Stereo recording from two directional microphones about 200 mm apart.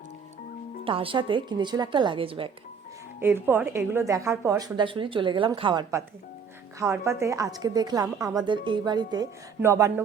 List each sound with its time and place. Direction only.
0.9 s a woman's voice: 25° right (ahead or behind)
3.2 s a woman's voice: 10° right (ahead or behind)